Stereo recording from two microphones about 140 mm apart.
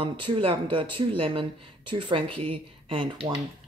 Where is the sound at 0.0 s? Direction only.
35° right (ahead or behind).